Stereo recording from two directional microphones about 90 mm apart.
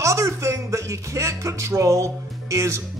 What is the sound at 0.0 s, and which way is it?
Music, 35° right (ahead or behind).